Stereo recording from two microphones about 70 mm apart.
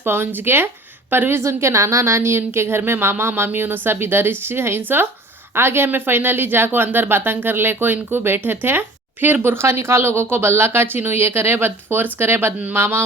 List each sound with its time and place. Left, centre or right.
0.0 s speech: right